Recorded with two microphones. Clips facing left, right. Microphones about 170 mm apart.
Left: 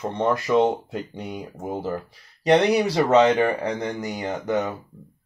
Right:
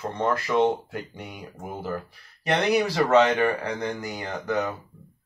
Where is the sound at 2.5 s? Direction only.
20° left (ahead or behind).